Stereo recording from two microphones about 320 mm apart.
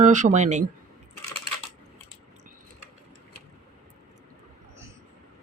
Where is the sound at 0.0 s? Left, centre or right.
Right.